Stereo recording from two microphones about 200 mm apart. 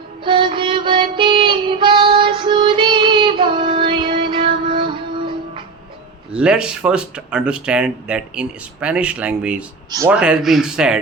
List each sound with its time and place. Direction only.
0.3 s music: 25° right (ahead or behind)
6.3 s speech: 5° right (ahead or behind)
10.2 s speech: 5° right (ahead or behind)